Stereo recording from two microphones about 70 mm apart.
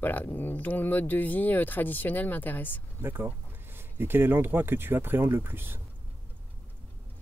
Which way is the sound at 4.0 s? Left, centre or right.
Right.